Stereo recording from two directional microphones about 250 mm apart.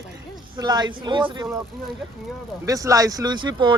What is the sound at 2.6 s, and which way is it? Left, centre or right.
Speech, centre.